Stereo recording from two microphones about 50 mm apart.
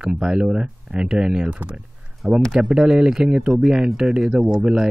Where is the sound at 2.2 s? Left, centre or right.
Centre.